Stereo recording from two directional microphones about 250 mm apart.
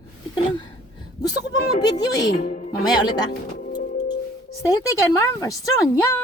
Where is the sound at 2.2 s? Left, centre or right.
Left.